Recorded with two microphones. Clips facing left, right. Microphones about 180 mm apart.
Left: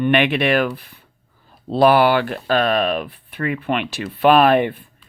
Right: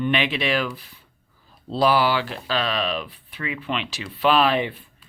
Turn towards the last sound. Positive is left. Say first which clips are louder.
# left 6 dB
turn(degrees=55)  # may be behind; listen again after turning